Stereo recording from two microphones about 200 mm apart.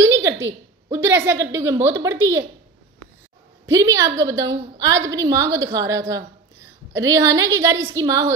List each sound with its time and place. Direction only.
0.0 s a sound: 15° right (ahead or behind)
0.9 s a woman's voice: 10° right (ahead or behind)
3.6 s a woman's voice: 15° right (ahead or behind)